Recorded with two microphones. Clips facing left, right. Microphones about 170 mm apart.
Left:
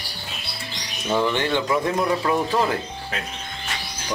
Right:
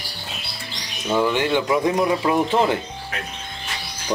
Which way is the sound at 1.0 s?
5° right (ahead or behind).